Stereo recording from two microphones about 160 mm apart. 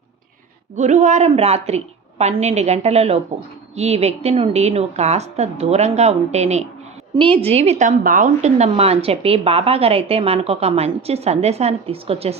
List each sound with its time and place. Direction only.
0.8 s a woman's voice: 50° right (ahead or behind)